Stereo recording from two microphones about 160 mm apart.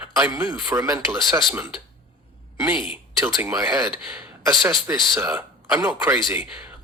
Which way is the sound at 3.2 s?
20° right (ahead or behind).